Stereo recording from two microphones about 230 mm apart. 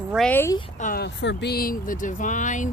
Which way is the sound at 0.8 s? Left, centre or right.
Left.